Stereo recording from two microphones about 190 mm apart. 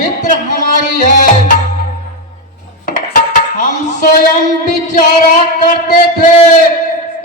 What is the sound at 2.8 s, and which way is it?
Dishes, 45° left (ahead or behind).